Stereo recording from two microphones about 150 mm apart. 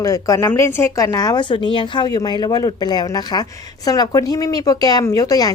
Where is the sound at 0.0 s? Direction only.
25° left (ahead or behind).